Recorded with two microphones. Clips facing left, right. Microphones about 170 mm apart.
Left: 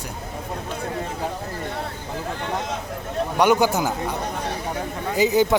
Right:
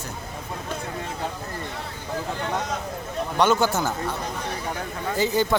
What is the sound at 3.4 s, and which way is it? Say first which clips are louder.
Speech: left 2 dB; 15° left (ahead or behind).